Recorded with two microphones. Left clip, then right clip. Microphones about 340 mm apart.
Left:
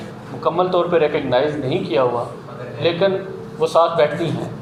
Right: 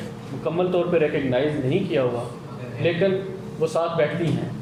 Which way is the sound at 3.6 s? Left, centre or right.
Left.